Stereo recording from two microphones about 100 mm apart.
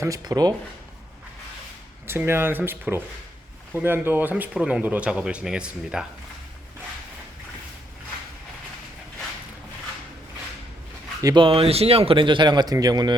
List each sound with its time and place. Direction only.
0.0 s speech: 35° right (ahead or behind)
2.0 s speech: 25° right (ahead or behind); by 6.1 s 10° right (ahead or behind)
11.3 s speech: 65° right (ahead or behind); by 13.1 s 45° right (ahead or behind)